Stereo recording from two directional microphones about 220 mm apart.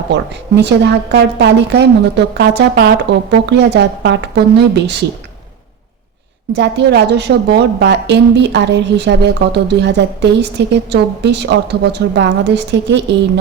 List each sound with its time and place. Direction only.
0.1 s a woman's voice: 50° right (ahead or behind)
6.6 s a woman's voice: 50° right (ahead or behind)